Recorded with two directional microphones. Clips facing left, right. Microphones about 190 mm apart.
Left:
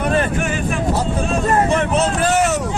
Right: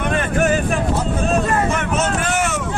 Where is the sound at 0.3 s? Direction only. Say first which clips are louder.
Right 5 dB; 40° right (ahead or behind).